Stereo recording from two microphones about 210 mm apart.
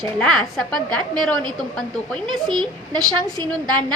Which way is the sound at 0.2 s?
Centre (ahead or behind).